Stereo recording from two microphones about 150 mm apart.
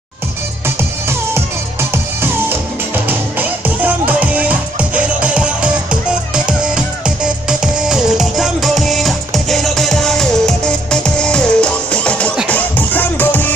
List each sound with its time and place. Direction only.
0.7 s music: 15° right (ahead or behind); by 13.5 s 10° left (ahead or behind)